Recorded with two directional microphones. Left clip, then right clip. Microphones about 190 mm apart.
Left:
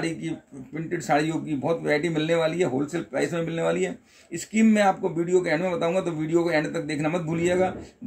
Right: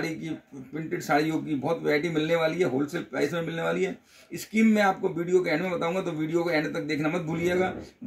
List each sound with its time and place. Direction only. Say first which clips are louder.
0.9 s a man's voice: left 2 dB; 5° left (ahead or behind)